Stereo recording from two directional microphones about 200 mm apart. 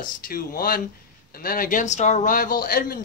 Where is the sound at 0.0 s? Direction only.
45° left (ahead or behind).